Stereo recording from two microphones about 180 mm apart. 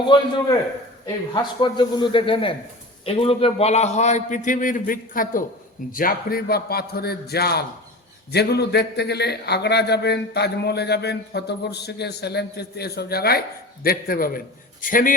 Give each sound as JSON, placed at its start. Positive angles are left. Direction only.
{"t": 1.0, "sound": "a man's voice", "side_deg": 25}